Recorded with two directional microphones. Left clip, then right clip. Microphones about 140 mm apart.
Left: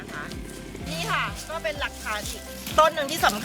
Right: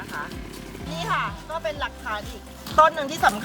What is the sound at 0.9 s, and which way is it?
Speech, 5° right (ahead or behind).